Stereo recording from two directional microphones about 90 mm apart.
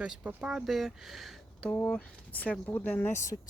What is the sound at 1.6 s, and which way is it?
Speech, 10° left (ahead or behind).